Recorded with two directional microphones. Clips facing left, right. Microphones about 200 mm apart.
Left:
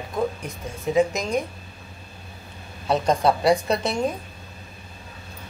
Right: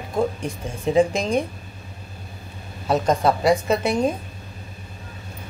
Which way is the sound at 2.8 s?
Centre (ahead or behind).